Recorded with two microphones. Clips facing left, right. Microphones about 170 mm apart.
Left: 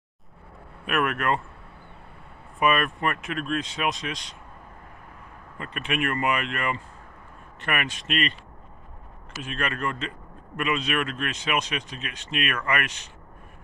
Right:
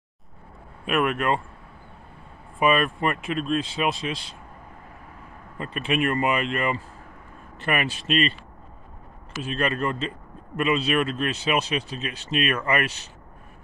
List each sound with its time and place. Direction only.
0.8 s speech: 25° right (ahead or behind)
2.6 s speech: 25° right (ahead or behind)
5.6 s a man's voice: 30° right (ahead or behind)
9.4 s a man's voice: 30° right (ahead or behind)